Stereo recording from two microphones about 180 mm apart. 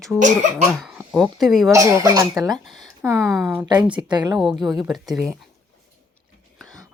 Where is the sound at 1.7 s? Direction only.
15° right (ahead or behind).